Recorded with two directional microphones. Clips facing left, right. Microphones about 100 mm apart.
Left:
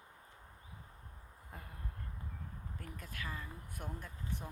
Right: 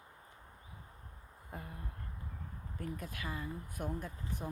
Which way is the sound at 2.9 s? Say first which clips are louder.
Right 1 dB; 15° right (ahead or behind).